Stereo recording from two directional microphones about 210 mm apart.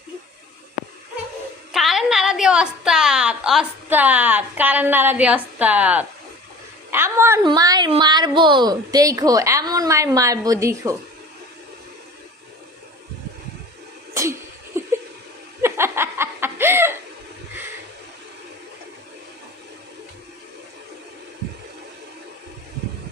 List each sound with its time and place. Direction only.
1.7 s a woman's voice: centre (ahead or behind)
14.1 s sneeze: 15° right (ahead or behind)
14.8 s a sound: 10° right (ahead or behind)
15.6 s chuckle: 10° right (ahead or behind)